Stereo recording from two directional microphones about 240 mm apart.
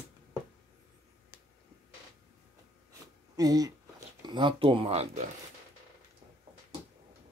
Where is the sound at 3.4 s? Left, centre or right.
Centre.